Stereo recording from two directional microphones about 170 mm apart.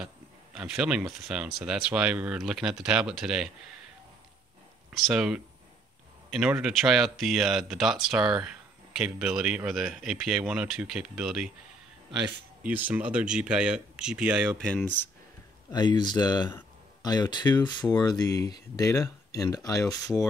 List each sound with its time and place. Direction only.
0.6 s speech: 5° right (ahead or behind)
4.9 s speech: centre (ahead or behind)
6.5 s speech: centre (ahead or behind)
12.6 s speech: 10° right (ahead or behind)
14.7 s speech: 5° left (ahead or behind)
15.7 s speech: 25° left (ahead or behind)